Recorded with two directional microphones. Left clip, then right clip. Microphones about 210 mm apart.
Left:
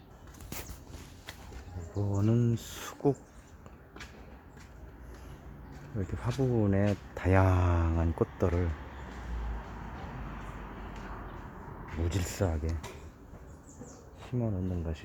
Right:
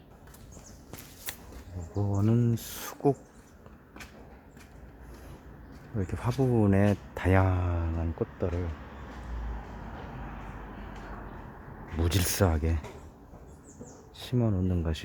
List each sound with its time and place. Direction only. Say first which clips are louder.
2.0 s speech: right 2 dB; 10° right (ahead or behind)
6.0 s speech: right 3 dB; 15° right (ahead or behind)
7.4 s speech: left 2 dB; 10° left (ahead or behind)
12.0 s speech: right 6 dB; 30° right (ahead or behind)
14.2 s speech: right 5 dB; 30° right (ahead or behind)